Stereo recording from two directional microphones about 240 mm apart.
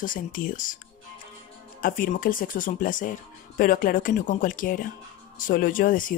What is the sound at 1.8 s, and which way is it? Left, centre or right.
Speech, left.